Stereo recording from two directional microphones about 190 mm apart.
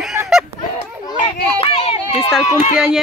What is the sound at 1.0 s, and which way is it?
Children playing, 25° left (ahead or behind).